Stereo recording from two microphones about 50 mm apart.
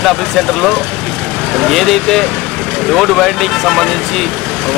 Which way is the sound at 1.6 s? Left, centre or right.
Centre.